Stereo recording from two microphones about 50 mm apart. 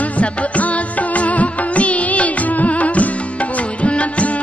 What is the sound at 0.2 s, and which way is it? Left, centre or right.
Music, left.